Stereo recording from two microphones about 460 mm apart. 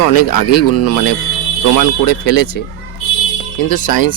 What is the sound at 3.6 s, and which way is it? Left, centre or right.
Speech, left.